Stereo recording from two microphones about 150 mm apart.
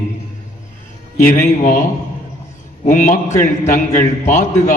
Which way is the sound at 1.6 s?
65° left (ahead or behind).